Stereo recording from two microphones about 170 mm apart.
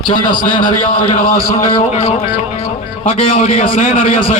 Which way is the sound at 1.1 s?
55° left (ahead or behind).